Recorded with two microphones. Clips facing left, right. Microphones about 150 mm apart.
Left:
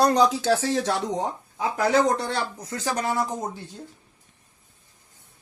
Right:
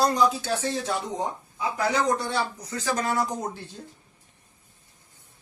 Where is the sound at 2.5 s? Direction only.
40° left (ahead or behind).